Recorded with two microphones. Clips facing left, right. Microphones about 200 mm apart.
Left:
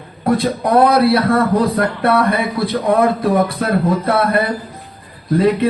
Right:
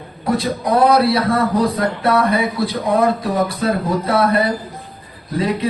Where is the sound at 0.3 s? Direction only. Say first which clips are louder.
Left 3 dB; 60° left (ahead or behind).